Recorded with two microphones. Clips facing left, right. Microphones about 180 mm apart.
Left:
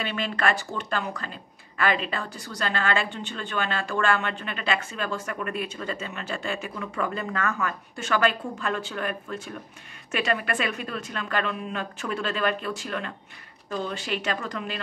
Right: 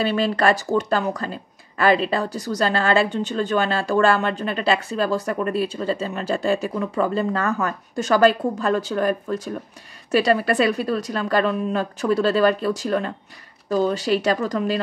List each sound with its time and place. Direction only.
0.0 s speech: 35° right (ahead or behind)